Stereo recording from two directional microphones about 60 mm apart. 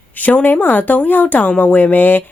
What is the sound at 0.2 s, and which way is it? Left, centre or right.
Speech, left.